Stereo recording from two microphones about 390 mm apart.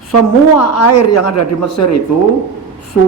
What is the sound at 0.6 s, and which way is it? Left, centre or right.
A man's voice, left.